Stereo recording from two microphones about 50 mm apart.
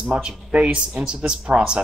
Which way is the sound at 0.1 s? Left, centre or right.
Right.